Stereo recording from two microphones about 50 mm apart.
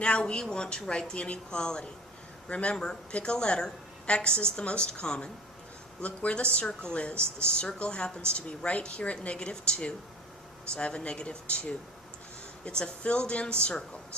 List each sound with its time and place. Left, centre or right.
0.0 s a woman's voice: left
2.7 s a woman's voice: centre
12.6 s a woman's voice: left